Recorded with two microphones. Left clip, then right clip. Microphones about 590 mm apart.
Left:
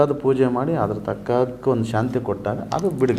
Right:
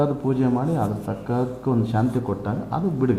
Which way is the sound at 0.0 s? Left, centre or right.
Left.